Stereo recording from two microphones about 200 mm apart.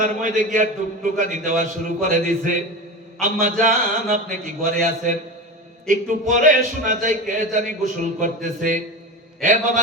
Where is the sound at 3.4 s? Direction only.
45° right (ahead or behind).